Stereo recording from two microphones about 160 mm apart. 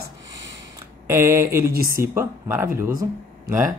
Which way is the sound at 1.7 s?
65° right (ahead or behind).